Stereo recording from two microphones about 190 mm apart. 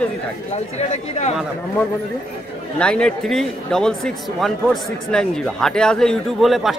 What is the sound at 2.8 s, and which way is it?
Speech, 5° left (ahead or behind).